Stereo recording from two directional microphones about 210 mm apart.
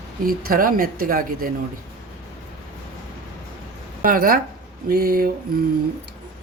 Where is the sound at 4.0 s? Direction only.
40° right (ahead or behind).